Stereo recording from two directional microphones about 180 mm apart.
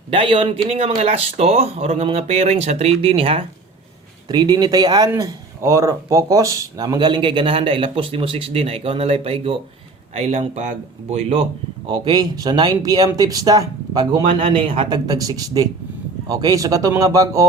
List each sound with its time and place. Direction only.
0.1 s speech: 30° right (ahead or behind)
11.9 s speech: 25° right (ahead or behind)
14.3 s speech: 40° right (ahead or behind); by 17.4 s 20° right (ahead or behind)